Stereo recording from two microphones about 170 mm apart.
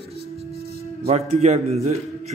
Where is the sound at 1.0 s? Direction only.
40° right (ahead or behind).